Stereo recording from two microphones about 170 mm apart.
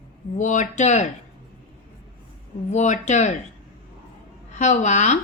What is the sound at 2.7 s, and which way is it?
Speech, 45° left (ahead or behind).